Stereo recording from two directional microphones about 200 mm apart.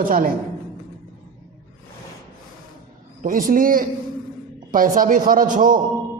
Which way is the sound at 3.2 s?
45° right (ahead or behind).